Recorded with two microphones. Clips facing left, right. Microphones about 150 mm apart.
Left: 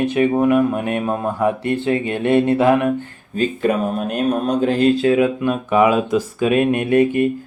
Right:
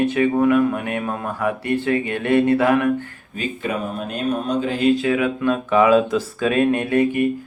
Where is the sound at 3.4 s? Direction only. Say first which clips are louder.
Left 7 dB; 45° left (ahead or behind).